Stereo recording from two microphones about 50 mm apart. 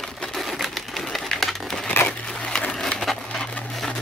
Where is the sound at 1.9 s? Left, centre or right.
Left.